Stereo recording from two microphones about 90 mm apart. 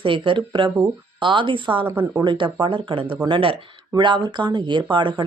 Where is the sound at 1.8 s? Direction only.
20° right (ahead or behind).